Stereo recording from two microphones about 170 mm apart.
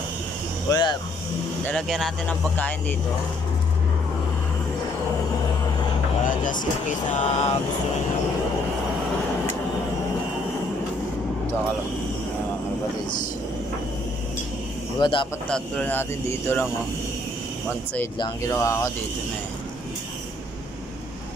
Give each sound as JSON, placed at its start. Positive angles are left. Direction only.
{"t": 0.7, "sound": "speech", "side_deg": 25}
{"t": 1.7, "sound": "speech", "side_deg": 5}
{"t": 6.2, "sound": "vehicle", "side_deg": 50}
{"t": 15.0, "sound": "speech", "side_deg": 30}
{"t": 15.4, "sound": "speech", "side_deg": 5}
{"t": 18.2, "sound": "speech", "side_deg": 20}